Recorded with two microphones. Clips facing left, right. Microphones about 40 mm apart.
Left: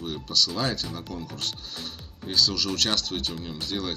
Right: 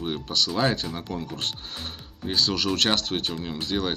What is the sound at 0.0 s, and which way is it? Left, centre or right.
Speech, right.